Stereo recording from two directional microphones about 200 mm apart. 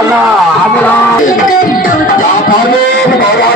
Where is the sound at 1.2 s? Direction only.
45° left (ahead or behind).